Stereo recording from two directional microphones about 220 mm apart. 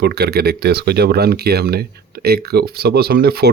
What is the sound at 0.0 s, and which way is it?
Speech, 45° right (ahead or behind).